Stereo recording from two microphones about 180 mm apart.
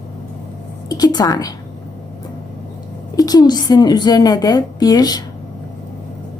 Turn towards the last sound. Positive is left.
turn(degrees=20)  # may be behind; listen again after turning